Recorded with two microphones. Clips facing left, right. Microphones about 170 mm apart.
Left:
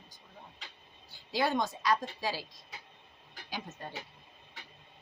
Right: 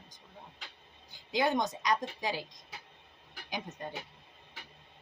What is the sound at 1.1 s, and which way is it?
Speech, 20° right (ahead or behind).